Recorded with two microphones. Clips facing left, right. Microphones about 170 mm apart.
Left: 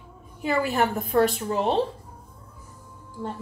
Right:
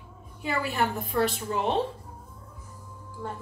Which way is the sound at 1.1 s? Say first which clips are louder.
Left 5 dB; 50° left (ahead or behind).